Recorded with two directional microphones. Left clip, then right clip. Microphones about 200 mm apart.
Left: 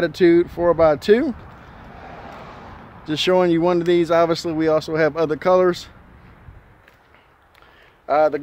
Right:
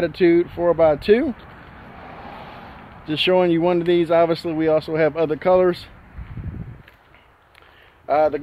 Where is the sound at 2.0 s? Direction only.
60° right (ahead or behind).